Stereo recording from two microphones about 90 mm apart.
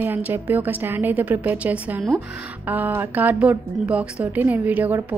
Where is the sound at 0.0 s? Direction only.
20° right (ahead or behind).